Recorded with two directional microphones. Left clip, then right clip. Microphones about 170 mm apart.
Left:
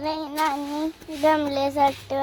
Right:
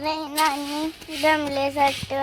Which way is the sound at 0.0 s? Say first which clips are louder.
Right 2 dB; 5° left (ahead or behind).